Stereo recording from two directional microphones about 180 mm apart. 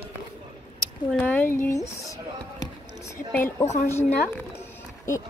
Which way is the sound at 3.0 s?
15° left (ahead or behind).